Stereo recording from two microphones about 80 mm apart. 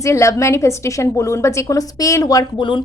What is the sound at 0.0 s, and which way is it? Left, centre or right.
A woman's voice, left.